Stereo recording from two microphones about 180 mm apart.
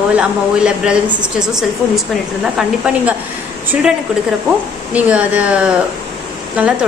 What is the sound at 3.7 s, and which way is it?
A woman's voice, 5° right (ahead or behind).